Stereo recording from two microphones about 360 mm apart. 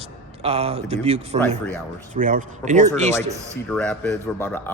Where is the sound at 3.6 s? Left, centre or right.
Centre.